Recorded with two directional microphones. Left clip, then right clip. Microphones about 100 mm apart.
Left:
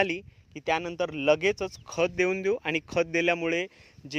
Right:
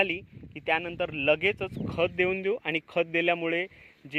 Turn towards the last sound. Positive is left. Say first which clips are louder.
# even
turn(degrees=45)  # may be behind; listen again after turning